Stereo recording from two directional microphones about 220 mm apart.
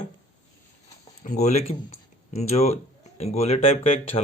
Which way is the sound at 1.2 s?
30° left (ahead or behind).